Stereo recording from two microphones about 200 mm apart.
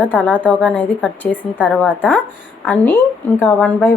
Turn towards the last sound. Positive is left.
turn(degrees=10)  # may be behind; listen again after turning